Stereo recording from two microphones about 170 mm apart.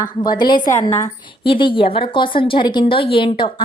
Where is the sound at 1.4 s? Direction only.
30° left (ahead or behind).